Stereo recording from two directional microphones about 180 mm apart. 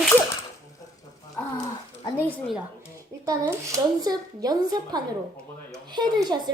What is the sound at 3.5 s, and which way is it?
Speech, 20° right (ahead or behind).